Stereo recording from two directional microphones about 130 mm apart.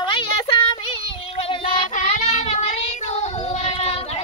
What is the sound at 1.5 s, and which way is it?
Child singing, 45° left (ahead or behind).